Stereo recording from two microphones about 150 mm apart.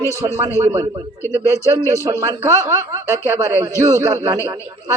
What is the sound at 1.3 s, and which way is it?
Speech, 20° left (ahead or behind).